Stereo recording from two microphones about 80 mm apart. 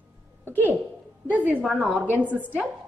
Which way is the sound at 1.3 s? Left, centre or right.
Centre.